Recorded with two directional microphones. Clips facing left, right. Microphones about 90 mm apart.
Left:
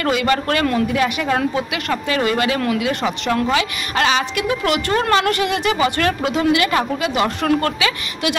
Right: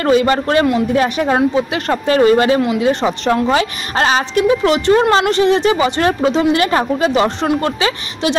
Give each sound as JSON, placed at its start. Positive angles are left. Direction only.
{"t": 0.0, "sound": "speech", "side_deg": -30}